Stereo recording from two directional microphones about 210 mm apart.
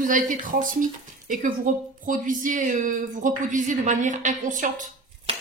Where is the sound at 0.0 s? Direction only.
40° right (ahead or behind).